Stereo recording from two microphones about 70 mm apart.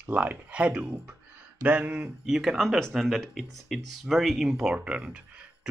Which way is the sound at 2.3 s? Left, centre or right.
Centre.